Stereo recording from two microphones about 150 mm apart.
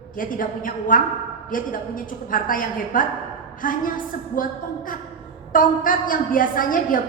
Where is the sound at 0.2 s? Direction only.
65° left (ahead or behind).